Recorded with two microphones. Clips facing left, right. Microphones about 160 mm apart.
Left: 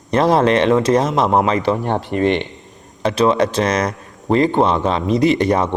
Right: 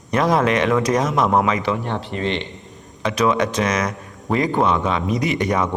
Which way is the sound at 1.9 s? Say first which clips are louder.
Left 7 dB; 50° left (ahead or behind).